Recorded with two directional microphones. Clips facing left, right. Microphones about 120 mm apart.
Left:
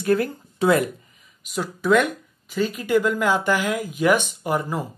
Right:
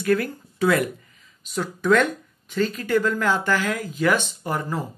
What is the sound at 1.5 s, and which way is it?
Speech, 10° left (ahead or behind).